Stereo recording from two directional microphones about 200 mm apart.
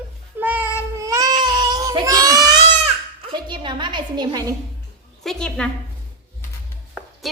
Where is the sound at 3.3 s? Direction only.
25° right (ahead or behind).